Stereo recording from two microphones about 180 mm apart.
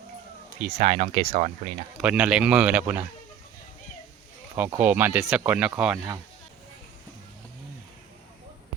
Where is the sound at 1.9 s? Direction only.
5° right (ahead or behind).